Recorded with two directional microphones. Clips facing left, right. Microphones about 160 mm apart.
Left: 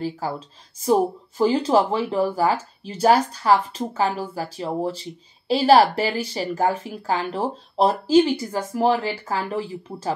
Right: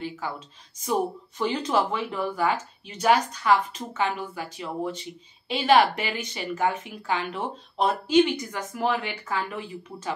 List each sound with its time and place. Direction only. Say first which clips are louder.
0.0 s speech: left 6 dB; 35° left (ahead or behind)